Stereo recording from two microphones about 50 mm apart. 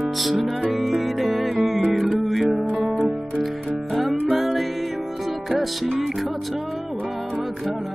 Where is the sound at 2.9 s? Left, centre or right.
Centre.